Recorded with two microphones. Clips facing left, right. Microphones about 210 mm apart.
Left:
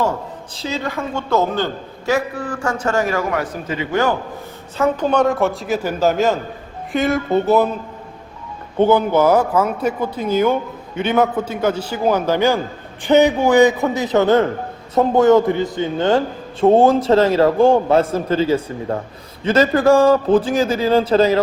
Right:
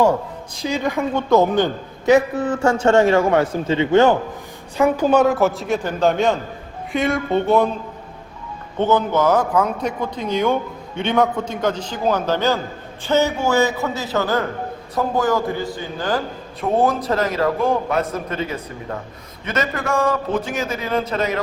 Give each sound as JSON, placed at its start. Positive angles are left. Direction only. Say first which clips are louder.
{"t": 0.5, "sound": "a man's voice", "louder": "right 3 dB", "side_deg": -15}
{"t": 4.8, "sound": "a man's voice", "louder": "right 1 dB", "side_deg": -5}
{"t": 8.8, "sound": "a man's voice", "louder": "left 4 dB", "side_deg": 10}